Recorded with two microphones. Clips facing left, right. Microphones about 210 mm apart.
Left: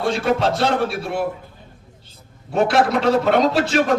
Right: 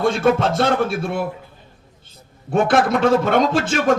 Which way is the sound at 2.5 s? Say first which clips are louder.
Right 1 dB; 50° right (ahead or behind).